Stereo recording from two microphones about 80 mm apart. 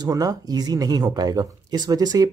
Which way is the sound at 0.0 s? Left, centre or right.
Right.